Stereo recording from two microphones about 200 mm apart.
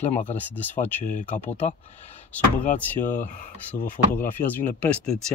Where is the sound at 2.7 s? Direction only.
40° left (ahead or behind).